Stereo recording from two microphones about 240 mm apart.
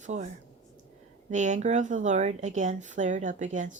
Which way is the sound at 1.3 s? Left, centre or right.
Right.